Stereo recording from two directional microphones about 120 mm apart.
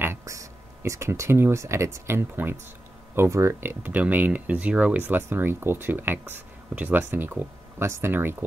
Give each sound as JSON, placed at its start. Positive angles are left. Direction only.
{"t": 0.0, "sound": "speech", "side_deg": -20}